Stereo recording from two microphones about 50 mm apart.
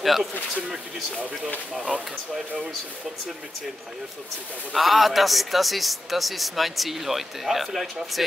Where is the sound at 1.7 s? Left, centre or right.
Centre.